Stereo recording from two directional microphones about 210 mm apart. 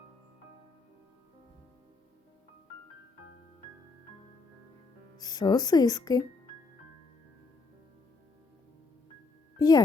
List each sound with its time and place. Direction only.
5.1 s speech: 20° left (ahead or behind)
9.6 s music: 20° left (ahead or behind)